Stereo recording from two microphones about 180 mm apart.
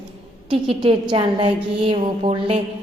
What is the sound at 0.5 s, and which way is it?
A woman's voice, 30° right (ahead or behind).